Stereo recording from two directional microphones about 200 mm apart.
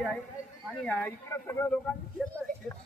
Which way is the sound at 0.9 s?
10° left (ahead or behind).